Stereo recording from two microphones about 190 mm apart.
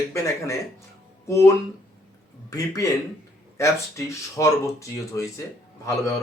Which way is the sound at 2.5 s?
15° left (ahead or behind).